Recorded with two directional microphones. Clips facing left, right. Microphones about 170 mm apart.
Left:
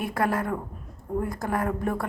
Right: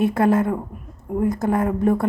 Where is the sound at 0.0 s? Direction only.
25° right (ahead or behind).